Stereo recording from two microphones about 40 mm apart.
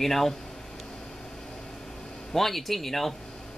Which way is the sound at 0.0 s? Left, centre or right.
Centre.